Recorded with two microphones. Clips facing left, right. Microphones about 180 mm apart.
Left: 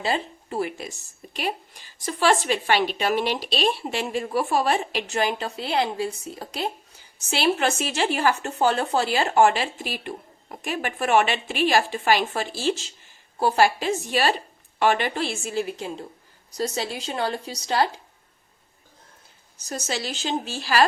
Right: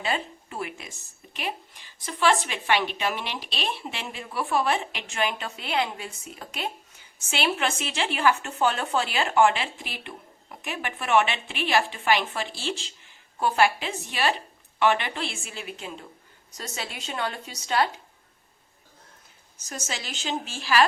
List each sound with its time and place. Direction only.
0.0 s a woman's voice: 30° left (ahead or behind)
19.5 s a woman's voice: 35° left (ahead or behind)